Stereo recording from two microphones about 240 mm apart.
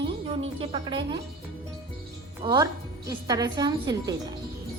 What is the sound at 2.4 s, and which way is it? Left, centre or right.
A woman's voice, centre.